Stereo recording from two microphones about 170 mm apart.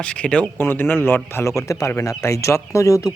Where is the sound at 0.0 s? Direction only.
5° left (ahead or behind).